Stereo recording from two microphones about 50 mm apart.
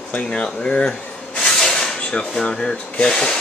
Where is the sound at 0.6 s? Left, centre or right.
Centre.